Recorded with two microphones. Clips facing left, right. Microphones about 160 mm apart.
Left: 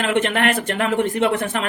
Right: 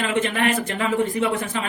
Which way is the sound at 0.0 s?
70° left (ahead or behind).